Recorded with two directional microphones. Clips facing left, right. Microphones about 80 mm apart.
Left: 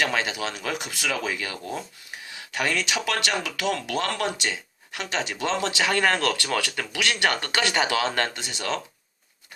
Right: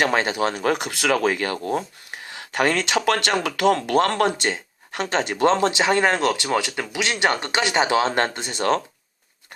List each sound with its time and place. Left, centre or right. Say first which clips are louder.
0.0 s speech: right 5 dB; right
0.8 s speech: right 8 dB; right